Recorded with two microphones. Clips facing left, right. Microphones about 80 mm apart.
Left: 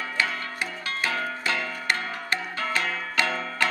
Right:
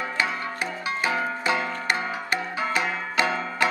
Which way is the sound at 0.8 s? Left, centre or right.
Centre.